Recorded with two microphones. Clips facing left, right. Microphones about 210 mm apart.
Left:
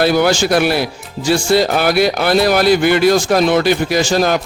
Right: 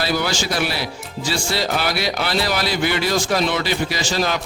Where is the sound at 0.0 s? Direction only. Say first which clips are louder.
Left 9 dB; 55° left (ahead or behind).